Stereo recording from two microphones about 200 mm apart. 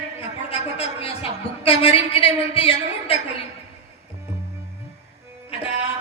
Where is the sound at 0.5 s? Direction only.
30° left (ahead or behind).